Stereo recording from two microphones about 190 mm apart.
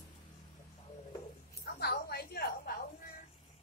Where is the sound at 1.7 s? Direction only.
55° left (ahead or behind).